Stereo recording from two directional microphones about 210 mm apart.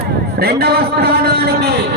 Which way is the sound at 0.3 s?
50° right (ahead or behind).